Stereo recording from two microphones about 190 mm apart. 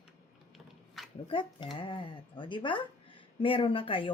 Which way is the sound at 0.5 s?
Centre (ahead or behind).